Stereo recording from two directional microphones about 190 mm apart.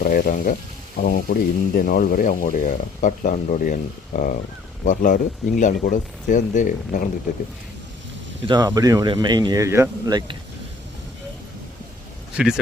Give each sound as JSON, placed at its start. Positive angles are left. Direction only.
{"t": 0.0, "sound": "speech", "side_deg": 50}
{"t": 8.4, "sound": "speech", "side_deg": -20}